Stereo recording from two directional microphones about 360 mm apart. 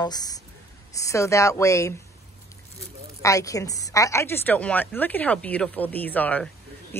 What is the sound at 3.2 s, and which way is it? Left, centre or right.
A woman's voice, centre.